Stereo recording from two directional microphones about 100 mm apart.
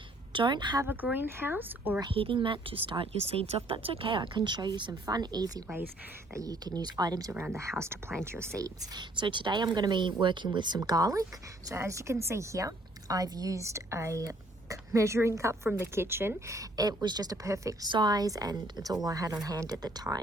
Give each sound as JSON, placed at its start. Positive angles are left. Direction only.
{"t": 0.3, "sound": "speech", "side_deg": -50}
{"t": 0.9, "sound": "a woman's voice", "side_deg": -20}
{"t": 2.0, "sound": "a woman's voice", "side_deg": -60}
{"t": 3.1, "sound": "a woman's voice", "side_deg": -85}
{"t": 7.8, "sound": "a woman's voice", "side_deg": -25}
{"t": 10.8, "sound": "a woman's voice", "side_deg": -35}
{"t": 17.8, "sound": "a woman's voice", "side_deg": -45}